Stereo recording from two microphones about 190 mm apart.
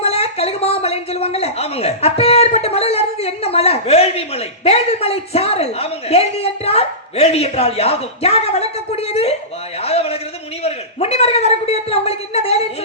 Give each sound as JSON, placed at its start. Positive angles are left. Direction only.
{"t": 0.0, "sound": "a man's voice", "side_deg": 30}
{"t": 9.8, "sound": "a sound", "side_deg": 30}
{"t": 10.6, "sound": "a man's voice", "side_deg": 35}